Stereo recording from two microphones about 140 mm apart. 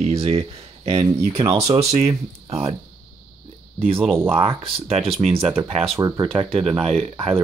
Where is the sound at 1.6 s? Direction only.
50° right (ahead or behind).